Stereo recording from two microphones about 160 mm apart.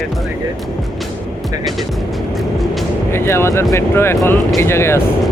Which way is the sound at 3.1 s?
15° left (ahead or behind).